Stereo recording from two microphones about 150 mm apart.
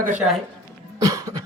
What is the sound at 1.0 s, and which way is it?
Cough, 20° right (ahead or behind).